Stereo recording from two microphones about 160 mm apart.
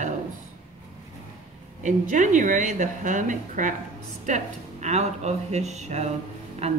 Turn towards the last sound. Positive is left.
turn(degrees=-40)  # may be behind; listen again after turning